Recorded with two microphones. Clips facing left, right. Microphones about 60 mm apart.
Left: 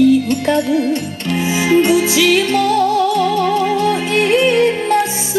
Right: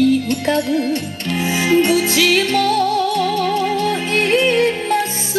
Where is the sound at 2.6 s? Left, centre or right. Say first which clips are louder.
Left 3 dB; left.